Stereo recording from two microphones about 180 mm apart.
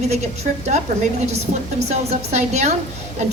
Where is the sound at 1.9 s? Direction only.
40° right (ahead or behind).